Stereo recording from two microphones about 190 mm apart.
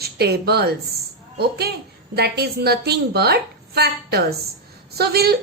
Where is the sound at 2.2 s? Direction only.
55° right (ahead or behind).